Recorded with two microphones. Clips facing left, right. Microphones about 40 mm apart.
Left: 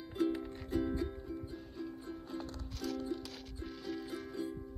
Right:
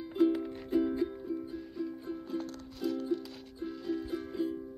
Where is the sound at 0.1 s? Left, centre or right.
Right.